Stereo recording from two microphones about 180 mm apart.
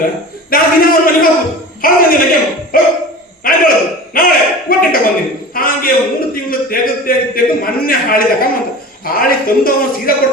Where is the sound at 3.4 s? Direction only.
55° left (ahead or behind).